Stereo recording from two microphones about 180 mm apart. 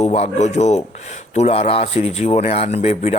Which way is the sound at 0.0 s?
35° left (ahead or behind).